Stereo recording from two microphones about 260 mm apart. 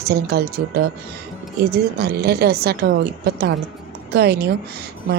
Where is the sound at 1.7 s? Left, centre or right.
Right.